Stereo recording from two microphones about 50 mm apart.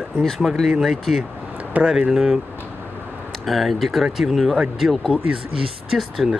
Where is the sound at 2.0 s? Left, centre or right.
Centre.